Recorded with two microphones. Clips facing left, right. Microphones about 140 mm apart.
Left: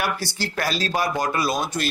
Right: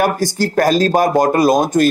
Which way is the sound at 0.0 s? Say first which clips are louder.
Right 10 dB; 45° right (ahead or behind).